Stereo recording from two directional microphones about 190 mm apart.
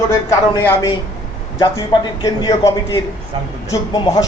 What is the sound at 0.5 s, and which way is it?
A man's voice, 15° left (ahead or behind).